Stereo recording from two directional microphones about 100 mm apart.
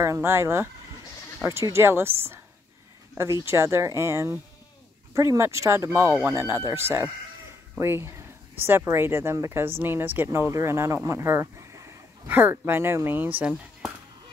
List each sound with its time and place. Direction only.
0.0 s speech: 25° right (ahead or behind)
3.4 s speech: 25° right (ahead or behind)
12.3 s speech: 20° right (ahead or behind)